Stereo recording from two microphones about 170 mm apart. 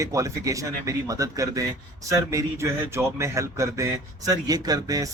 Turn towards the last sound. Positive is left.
turn(degrees=-20)  # may be behind; listen again after turning